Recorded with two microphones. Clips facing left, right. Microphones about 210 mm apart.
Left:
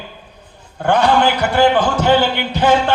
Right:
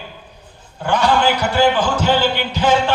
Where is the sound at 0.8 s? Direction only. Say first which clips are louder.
Left 2 dB; 55° left (ahead or behind).